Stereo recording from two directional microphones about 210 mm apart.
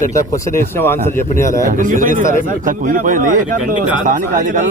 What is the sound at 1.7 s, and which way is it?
A man's voice, 40° right (ahead or behind).